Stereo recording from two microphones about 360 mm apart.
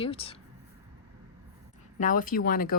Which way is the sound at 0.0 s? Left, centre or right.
Centre.